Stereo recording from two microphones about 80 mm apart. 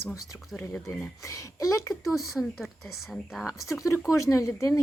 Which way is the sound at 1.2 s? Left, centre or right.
Left.